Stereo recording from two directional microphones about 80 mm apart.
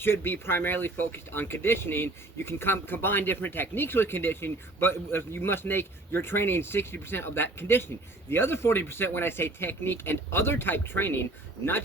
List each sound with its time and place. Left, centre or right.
0.0 s speech: left